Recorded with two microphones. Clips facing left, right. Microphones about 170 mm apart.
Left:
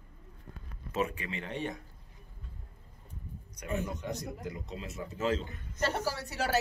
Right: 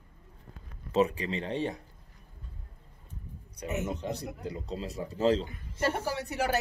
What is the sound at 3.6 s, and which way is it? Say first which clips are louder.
Speech: right 2 dB; 20° right (ahead or behind).